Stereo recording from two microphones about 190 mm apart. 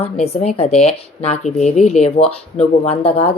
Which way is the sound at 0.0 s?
35° left (ahead or behind).